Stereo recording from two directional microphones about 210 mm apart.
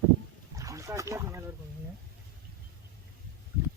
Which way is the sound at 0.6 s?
15° right (ahead or behind).